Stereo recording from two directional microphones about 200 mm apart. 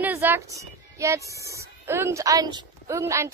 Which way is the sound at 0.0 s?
10° right (ahead or behind).